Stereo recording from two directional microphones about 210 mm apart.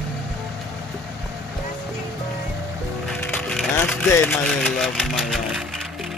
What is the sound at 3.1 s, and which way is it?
Music, 5° left (ahead or behind).